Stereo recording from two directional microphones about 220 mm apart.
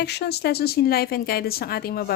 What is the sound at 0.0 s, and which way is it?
Speech, 50° left (ahead or behind).